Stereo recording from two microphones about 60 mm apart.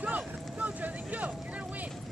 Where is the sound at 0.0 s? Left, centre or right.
Right.